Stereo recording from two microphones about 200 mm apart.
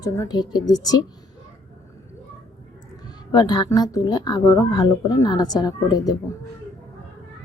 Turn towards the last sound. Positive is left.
turn(degrees=20)  # may be behind; listen again after turning